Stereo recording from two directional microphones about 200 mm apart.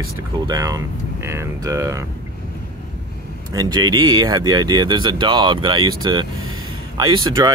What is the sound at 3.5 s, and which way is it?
Speech, 20° right (ahead or behind).